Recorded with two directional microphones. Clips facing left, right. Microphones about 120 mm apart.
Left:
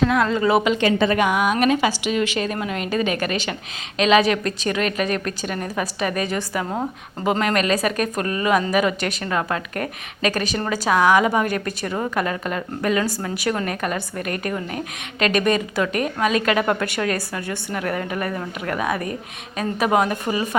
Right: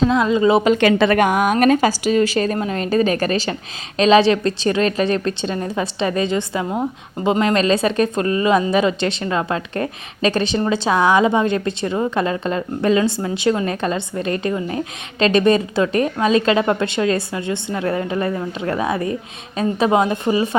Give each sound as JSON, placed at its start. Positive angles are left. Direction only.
{"t": 0.0, "sound": "a woman's voice", "side_deg": -20}
{"t": 0.8, "sound": "a woman's voice", "side_deg": -75}
{"t": 1.2, "sound": "a woman's voice", "side_deg": -45}